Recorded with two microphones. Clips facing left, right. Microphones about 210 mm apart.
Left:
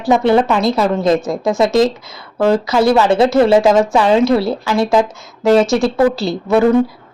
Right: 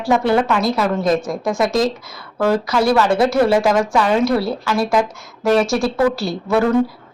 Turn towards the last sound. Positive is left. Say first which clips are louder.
# left 4 dB
turn(degrees=20)  # may be behind; listen again after turning